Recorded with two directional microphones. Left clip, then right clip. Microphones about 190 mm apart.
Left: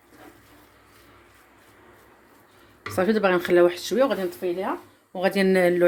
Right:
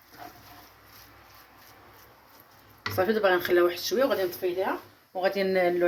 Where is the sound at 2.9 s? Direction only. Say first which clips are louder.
Left 2 dB; 50° left (ahead or behind).